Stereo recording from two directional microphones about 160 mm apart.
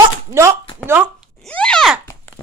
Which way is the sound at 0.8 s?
10° right (ahead or behind).